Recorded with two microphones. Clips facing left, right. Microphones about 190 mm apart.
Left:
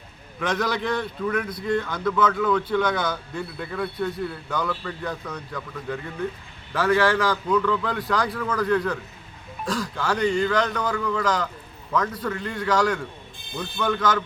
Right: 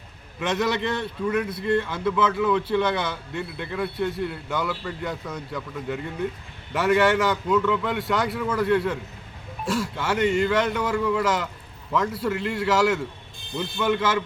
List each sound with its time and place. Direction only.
0.4 s a man's voice: 25° right (ahead or behind)
1.8 s a man's voice: 5° right (ahead or behind)
2.5 s a man's voice: 20° right (ahead or behind)
2.7 s a man's voice: centre (ahead or behind)
7.3 s a man's voice: 5° right (ahead or behind)
9.6 s speech: 25° right (ahead or behind)
10.0 s a man's voice: 5° right (ahead or behind)